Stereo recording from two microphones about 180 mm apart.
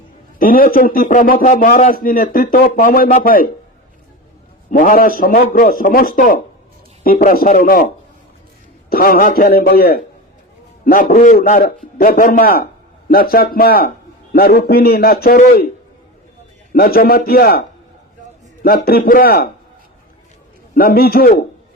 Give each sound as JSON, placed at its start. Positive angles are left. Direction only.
{"t": 0.3, "sound": "a man's voice", "side_deg": 50}
{"t": 4.7, "sound": "a man's voice", "side_deg": 50}
{"t": 8.9, "sound": "a man's voice", "side_deg": 55}
{"t": 16.7, "sound": "a man's voice", "side_deg": 55}
{"t": 18.6, "sound": "a man's voice", "side_deg": 55}
{"t": 20.7, "sound": "a man's voice", "side_deg": 55}